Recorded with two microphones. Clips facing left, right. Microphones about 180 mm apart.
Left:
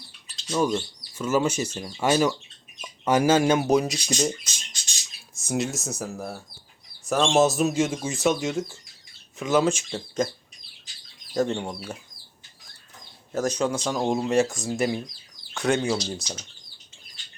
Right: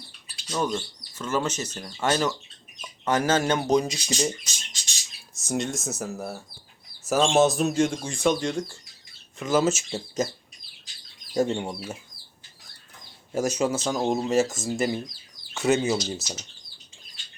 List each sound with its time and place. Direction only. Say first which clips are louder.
0.4 s speech: left 3 dB; 5° left (ahead or behind)
5.4 s speech: left 1 dB; centre (ahead or behind)
11.3 s speech: right 1 dB; 10° right (ahead or behind)
13.3 s speech: even; 10° right (ahead or behind)